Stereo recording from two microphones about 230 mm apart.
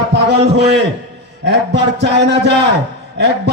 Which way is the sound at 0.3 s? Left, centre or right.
Right.